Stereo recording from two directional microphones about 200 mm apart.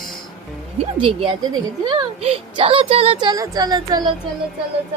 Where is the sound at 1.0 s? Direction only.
25° right (ahead or behind).